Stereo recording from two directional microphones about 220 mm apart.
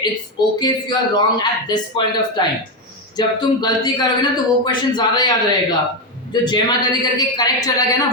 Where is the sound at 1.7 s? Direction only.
20° left (ahead or behind).